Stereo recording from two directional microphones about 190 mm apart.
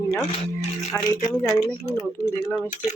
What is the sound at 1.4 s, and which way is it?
Speech, 15° left (ahead or behind).